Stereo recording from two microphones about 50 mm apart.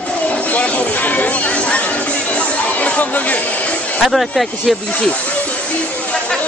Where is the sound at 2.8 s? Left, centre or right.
Left.